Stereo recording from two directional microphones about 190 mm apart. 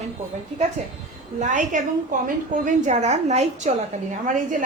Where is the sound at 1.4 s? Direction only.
40° right (ahead or behind).